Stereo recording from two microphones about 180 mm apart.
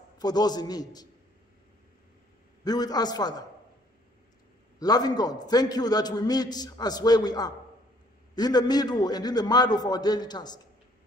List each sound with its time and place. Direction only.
0.2 s a man's voice: 20° left (ahead or behind)
2.6 s a man's voice: 20° left (ahead or behind)
4.7 s a man's voice: 20° left (ahead or behind)